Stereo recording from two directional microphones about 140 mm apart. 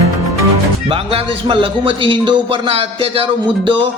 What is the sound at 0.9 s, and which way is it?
A man's voice, 40° right (ahead or behind).